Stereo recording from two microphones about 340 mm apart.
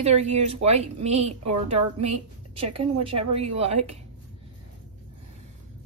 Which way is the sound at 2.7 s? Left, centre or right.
Right.